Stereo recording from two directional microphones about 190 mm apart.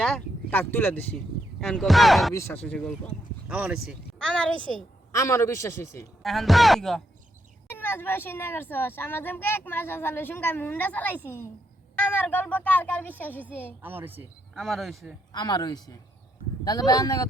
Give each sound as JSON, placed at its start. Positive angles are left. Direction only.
{"t": 0.0, "sound": "a sound", "side_deg": 0}
{"t": 0.6, "sound": "a child's voice", "side_deg": 10}
{"t": 1.6, "sound": "speech", "side_deg": 0}
{"t": 2.3, "sound": "a child's voice", "side_deg": 10}
{"t": 3.5, "sound": "a woman's voice", "side_deg": -5}
{"t": 5.1, "sound": "a child's voice", "side_deg": 15}
{"t": 6.2, "sound": "a child's voice", "side_deg": 0}
{"t": 13.8, "sound": "a woman's voice", "side_deg": -10}
{"t": 14.5, "sound": "speech", "side_deg": 0}
{"t": 15.3, "sound": "speech", "side_deg": 20}